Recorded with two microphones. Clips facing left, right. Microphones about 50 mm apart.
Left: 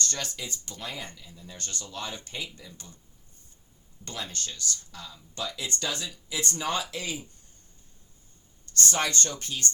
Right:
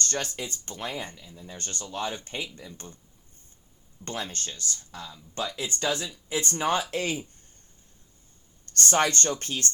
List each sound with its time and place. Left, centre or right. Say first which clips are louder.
0.0 s speech: right 3 dB; right
4.0 s speech: right 3 dB; right
6.9 s speech: right 6 dB; right
8.7 s speech: right 4 dB; right